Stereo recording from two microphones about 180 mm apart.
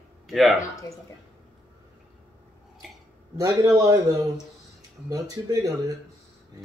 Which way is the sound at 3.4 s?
20° right (ahead or behind).